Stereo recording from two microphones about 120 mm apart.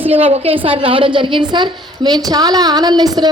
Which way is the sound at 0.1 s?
55° right (ahead or behind).